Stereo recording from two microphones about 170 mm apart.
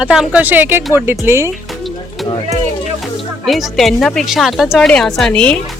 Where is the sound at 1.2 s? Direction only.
15° right (ahead or behind).